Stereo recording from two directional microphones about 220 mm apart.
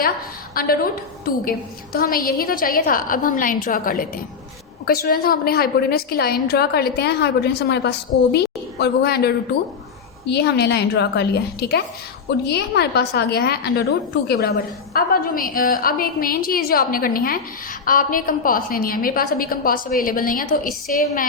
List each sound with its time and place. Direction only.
0.5 s a woman's voice: 40° left (ahead or behind)